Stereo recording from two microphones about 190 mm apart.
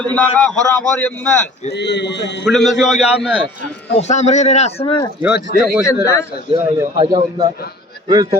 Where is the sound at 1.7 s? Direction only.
65° left (ahead or behind).